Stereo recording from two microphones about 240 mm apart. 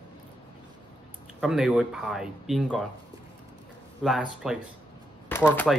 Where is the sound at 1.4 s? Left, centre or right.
Centre.